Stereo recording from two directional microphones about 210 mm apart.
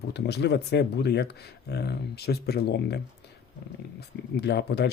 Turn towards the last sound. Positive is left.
turn(degrees=55)  # may be behind; listen again after turning